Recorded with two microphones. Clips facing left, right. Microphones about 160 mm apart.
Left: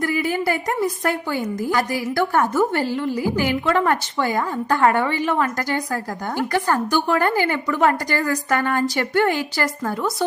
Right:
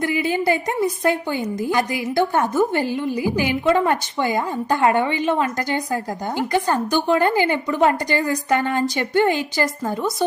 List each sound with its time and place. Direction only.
0.0 s a woman's voice: 20° right (ahead or behind)